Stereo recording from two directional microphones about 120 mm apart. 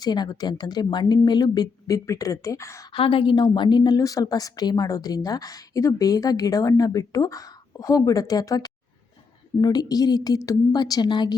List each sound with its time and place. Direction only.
0.0 s a woman's voice: 35° left (ahead or behind)
2.9 s a woman's voice: 45° left (ahead or behind)